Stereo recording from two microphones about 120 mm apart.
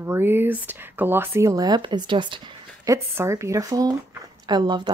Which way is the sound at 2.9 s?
25° right (ahead or behind).